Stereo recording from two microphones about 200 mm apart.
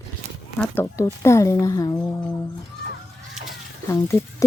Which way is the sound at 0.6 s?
10° left (ahead or behind).